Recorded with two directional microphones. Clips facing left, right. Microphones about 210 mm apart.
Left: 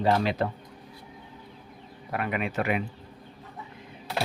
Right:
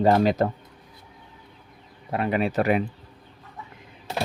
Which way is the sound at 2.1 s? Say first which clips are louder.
Right 6 dB; 30° right (ahead or behind).